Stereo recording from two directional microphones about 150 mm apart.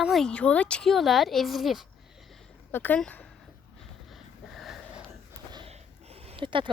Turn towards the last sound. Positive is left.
turn(degrees=-35)  # may be behind; listen again after turning